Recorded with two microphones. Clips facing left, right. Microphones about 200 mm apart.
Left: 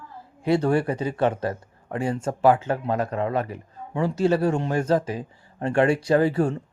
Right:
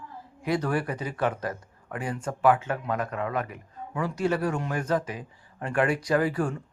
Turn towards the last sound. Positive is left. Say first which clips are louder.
# left 5 dB
turn(degrees=25)  # may be behind; listen again after turning